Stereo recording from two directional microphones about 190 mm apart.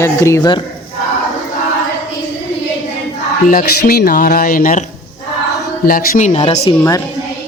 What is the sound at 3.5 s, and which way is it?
Speech, 50° left (ahead or behind).